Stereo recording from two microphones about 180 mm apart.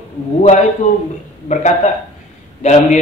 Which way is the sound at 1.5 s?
40° left (ahead or behind).